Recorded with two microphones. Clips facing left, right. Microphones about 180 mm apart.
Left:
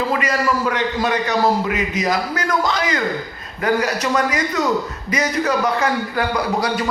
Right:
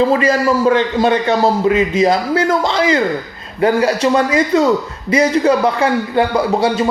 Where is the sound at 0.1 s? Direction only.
30° right (ahead or behind).